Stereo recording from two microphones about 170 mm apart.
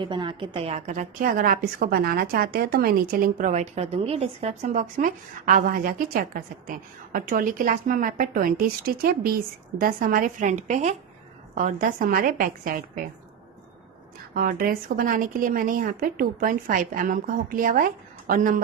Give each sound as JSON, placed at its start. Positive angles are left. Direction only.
{"t": 0.0, "sound": "a woman's voice", "side_deg": -30}
{"t": 14.3, "sound": "a woman's voice", "side_deg": -60}